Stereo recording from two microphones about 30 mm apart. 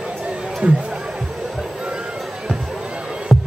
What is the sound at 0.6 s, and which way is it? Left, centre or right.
Speech, right.